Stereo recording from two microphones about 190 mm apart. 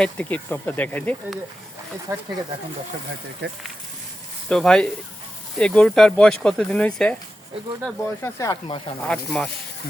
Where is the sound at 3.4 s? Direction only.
60° right (ahead or behind).